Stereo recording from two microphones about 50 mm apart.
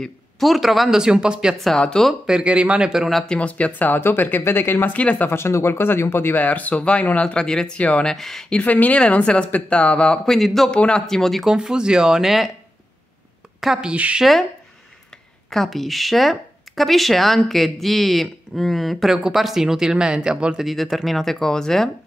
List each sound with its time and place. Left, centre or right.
0.4 s speech: centre
1.8 s a man's voice: centre
2.2 s speech: centre
3.3 s speech: left
4.9 s speech: left
5.3 s speech: left
6.4 s a man's voice: left; by 8.5 s centre
8.5 s speech: left
10.3 s speech: centre
10.7 s a man's voice: centre
11.4 s speech: centre
13.6 s speech: centre
15.5 s speech: centre
20.5 s speech: centre